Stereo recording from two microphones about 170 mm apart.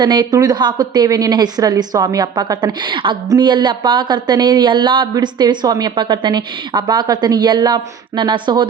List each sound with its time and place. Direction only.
0.0 s a woman's voice: 25° right (ahead or behind)